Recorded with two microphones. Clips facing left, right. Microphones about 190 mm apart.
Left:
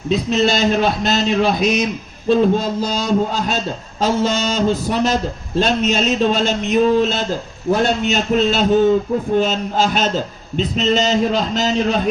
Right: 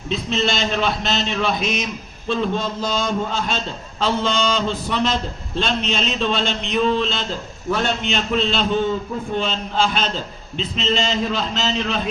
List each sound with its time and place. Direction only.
0.1 s a man's voice: 40° left (ahead or behind)